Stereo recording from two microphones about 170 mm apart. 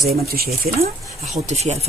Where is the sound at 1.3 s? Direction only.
45° right (ahead or behind).